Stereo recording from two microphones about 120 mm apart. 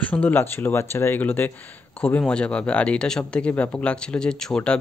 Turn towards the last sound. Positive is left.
turn(degrees=5)  # may be behind; listen again after turning